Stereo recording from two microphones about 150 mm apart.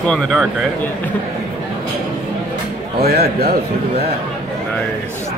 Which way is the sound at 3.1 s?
90° right.